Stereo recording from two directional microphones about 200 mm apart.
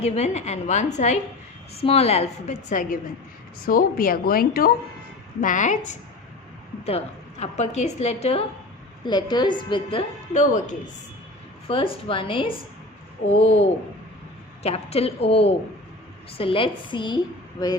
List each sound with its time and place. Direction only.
0.0 s a woman's voice: 35° left (ahead or behind)
10.3 s a woman's voice: 35° left (ahead or behind)
11.7 s a woman's voice: 25° left (ahead or behind)
14.6 s a woman's voice: 30° left (ahead or behind)